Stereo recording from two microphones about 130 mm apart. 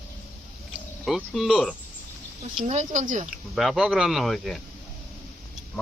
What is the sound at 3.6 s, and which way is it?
Speech, centre (ahead or behind).